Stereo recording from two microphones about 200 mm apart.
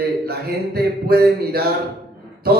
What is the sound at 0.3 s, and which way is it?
A man's voice, 50° right (ahead or behind).